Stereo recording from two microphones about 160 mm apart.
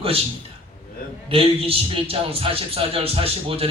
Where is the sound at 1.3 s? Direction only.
35° right (ahead or behind).